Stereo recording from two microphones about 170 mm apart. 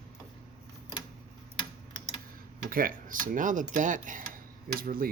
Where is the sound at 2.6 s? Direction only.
55° right (ahead or behind).